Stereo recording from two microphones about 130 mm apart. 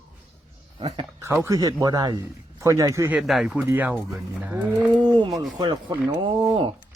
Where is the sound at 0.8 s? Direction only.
40° right (ahead or behind).